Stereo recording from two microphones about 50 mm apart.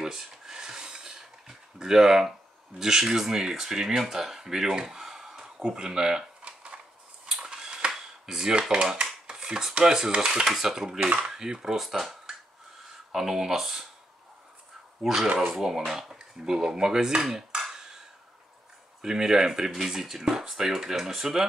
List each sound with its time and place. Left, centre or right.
0.0 s filing: centre
1.8 s speech: centre
5.8 s a sound: centre
9.8 s speech: centre
11.1 s speech: right
11.3 s speech: centre
15.1 s speech: centre
17.6 s cutlery: centre
18.9 s speech: centre